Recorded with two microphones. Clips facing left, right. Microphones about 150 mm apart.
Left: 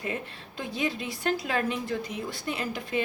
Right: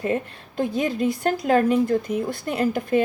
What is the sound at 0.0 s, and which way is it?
A woman's voice, 50° right (ahead or behind).